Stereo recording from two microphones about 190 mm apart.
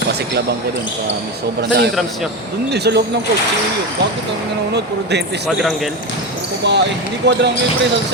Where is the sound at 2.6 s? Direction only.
60° right (ahead or behind).